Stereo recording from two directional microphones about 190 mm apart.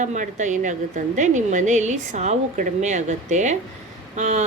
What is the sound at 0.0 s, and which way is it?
A woman's voice, 40° right (ahead or behind).